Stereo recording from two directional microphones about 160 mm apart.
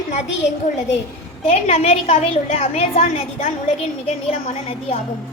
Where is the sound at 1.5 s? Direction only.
40° left (ahead or behind).